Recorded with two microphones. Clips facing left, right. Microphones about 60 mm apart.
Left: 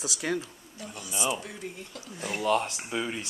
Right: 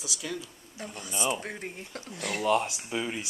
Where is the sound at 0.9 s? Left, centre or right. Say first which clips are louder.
Even; right.